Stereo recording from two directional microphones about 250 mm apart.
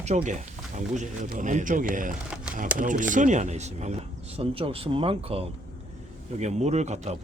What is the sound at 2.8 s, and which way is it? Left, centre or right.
Speech, right.